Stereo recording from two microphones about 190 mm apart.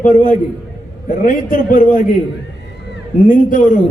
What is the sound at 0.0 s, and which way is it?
Speech, 45° left (ahead or behind).